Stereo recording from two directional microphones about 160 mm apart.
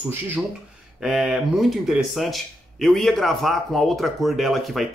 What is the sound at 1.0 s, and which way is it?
Speech, centre (ahead or behind).